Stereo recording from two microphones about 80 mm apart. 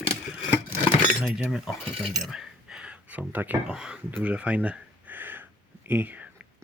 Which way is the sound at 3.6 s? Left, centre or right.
Centre.